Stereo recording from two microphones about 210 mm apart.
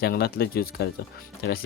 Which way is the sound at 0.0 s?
50° left (ahead or behind).